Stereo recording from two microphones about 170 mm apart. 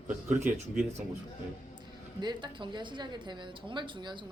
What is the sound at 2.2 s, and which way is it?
A woman's voice, 25° right (ahead or behind).